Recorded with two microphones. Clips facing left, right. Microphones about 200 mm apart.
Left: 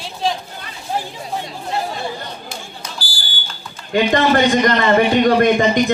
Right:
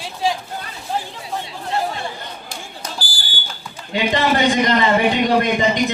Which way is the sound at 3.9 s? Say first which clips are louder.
Left 5 dB; 50° left (ahead or behind).